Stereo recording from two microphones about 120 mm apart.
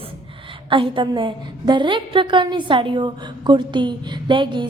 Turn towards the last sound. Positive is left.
turn(degrees=-40)  # may be behind; listen again after turning